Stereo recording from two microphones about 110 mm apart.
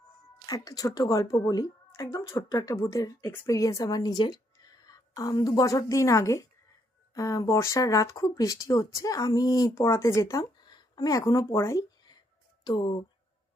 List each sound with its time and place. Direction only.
0.4 s a woman's voice: 35° left (ahead or behind)
12.6 s speech: 40° left (ahead or behind)